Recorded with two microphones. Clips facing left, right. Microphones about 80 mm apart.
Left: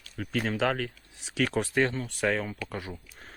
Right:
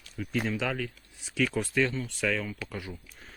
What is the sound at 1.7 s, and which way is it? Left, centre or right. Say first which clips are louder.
Speech: even; left.